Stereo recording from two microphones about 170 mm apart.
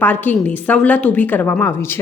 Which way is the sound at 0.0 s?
10° left (ahead or behind).